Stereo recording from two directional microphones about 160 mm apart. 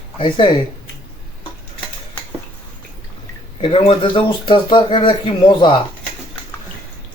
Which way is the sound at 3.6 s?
35° left (ahead or behind).